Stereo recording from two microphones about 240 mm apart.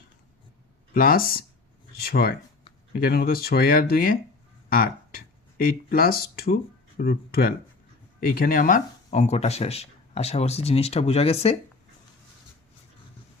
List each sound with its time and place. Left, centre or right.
0.9 s speech: left